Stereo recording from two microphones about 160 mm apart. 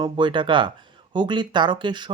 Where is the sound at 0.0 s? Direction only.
30° right (ahead or behind).